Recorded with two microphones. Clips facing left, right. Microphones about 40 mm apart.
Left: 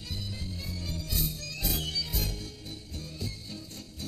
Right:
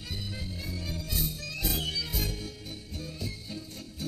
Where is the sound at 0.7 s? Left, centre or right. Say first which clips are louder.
Right 1 dB; centre.